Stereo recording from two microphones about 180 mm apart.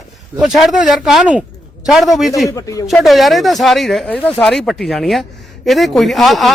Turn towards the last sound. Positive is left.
turn(degrees=0)  # may be behind; listen again after turning